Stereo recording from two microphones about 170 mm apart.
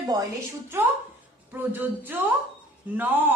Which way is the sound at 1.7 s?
10° right (ahead or behind).